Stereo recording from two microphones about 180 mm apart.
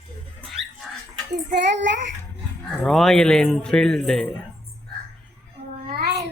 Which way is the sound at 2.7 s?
5° left (ahead or behind).